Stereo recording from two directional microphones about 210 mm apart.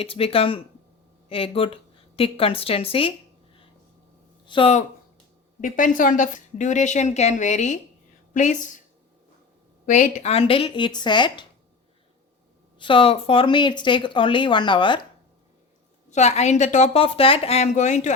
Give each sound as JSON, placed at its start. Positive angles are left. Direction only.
{"t": 0.0, "sound": "speech", "side_deg": 25}
{"t": 4.4, "sound": "speech", "side_deg": 25}
{"t": 5.5, "sound": "a woman's voice", "side_deg": 40}
{"t": 9.8, "sound": "speech", "side_deg": 40}
{"t": 12.8, "sound": "speech", "side_deg": 25}
{"t": 16.0, "sound": "a woman's voice", "side_deg": 35}